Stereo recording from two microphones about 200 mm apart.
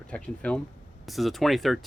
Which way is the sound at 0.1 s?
5° left (ahead or behind).